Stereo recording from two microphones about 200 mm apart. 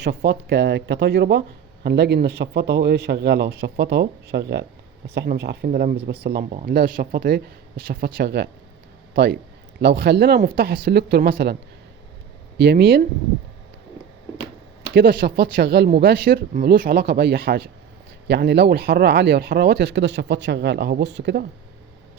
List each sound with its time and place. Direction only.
0.0 s speech: 55° right (ahead or behind)
12.5 s speech: 55° right (ahead or behind)
14.9 s speech: 50° right (ahead or behind)